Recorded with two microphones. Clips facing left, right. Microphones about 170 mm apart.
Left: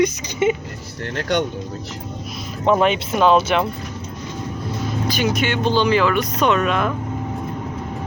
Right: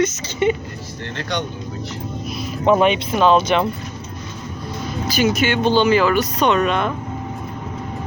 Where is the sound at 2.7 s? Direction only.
5° right (ahead or behind).